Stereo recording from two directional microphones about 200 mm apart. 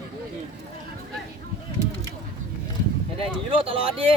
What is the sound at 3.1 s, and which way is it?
Speech, 25° right (ahead or behind).